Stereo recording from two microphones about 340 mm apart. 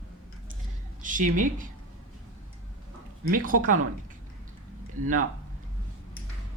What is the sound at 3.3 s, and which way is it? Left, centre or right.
Speech, right.